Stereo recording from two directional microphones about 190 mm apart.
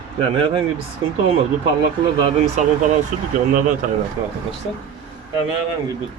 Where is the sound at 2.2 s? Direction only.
40° right (ahead or behind).